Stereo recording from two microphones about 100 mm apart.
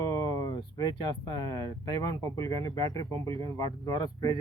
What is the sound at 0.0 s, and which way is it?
Speech, 35° left (ahead or behind).